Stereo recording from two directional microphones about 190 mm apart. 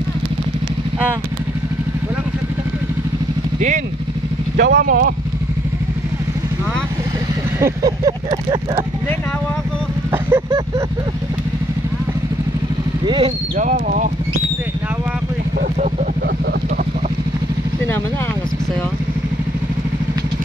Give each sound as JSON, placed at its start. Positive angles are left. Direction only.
{"t": 3.5, "sound": "speech", "side_deg": -40}
{"t": 4.6, "sound": "speech", "side_deg": -60}
{"t": 7.6, "sound": "a sound", "side_deg": -20}
{"t": 10.1, "sound": "vehicle", "side_deg": -10}
{"t": 13.0, "sound": "speech", "side_deg": -25}
{"t": 13.6, "sound": "speech", "side_deg": -45}